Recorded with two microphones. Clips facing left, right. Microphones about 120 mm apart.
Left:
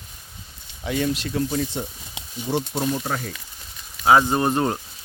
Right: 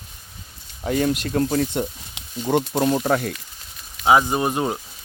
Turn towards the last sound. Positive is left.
turn(degrees=-10)  # may be behind; listen again after turning